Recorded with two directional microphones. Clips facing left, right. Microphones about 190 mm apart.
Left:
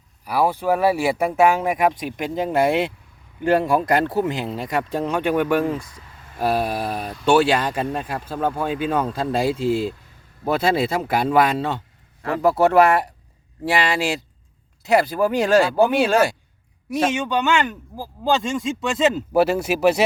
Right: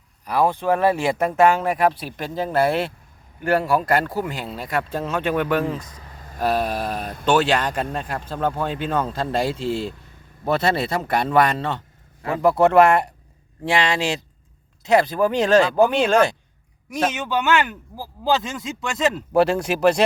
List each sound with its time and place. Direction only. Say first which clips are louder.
0.3 s speech: even; 10° left (ahead or behind)
6.1 s a sound: right 1 dB; 40° right (ahead or behind)
6.4 s speech: even; 10° left (ahead or behind)